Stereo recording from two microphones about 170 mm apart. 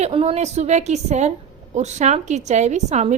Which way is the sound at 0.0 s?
35° right (ahead or behind).